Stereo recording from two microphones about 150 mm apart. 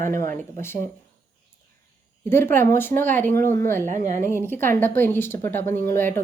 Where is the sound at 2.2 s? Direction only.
15° left (ahead or behind).